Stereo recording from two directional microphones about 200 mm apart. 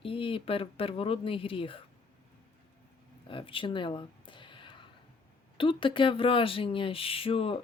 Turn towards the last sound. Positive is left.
turn(degrees=25)  # may be behind; listen again after turning